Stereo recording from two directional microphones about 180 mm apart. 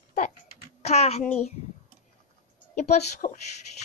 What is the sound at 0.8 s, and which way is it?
Speech, 35° left (ahead or behind).